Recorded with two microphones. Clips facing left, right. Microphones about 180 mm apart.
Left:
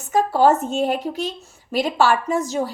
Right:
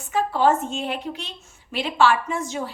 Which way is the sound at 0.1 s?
40° left (ahead or behind).